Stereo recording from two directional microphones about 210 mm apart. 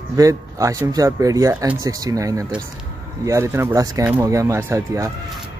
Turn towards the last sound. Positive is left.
turn(degrees=-15)  # may be behind; listen again after turning